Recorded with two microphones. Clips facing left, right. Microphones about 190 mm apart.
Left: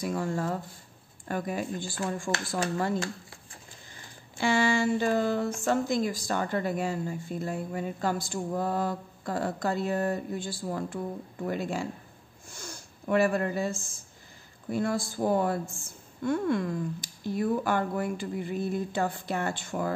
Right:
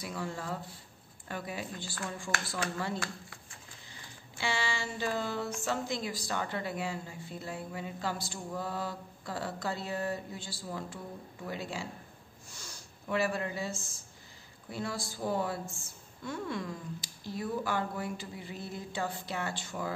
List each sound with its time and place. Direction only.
0.0 s a woman's voice: 45° left (ahead or behind)
4.4 s a woman's voice: 50° left (ahead or behind)
12.4 s a sound: 50° left (ahead or behind)
14.7 s a woman's voice: 50° left (ahead or behind)